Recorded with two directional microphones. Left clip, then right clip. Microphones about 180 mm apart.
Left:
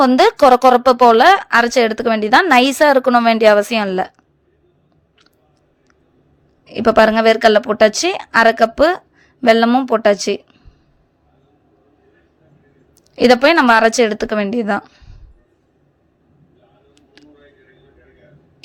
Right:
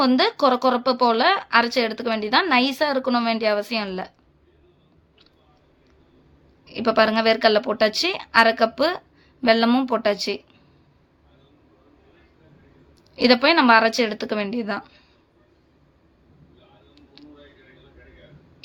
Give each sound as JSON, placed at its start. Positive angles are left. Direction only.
{"t": 0.0, "sound": "a woman's voice", "side_deg": 45}
{"t": 6.7, "sound": "a woman's voice", "side_deg": 45}
{"t": 13.1, "sound": "a woman's voice", "side_deg": 45}